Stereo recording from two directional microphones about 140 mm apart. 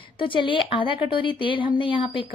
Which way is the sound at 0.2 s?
35° left (ahead or behind).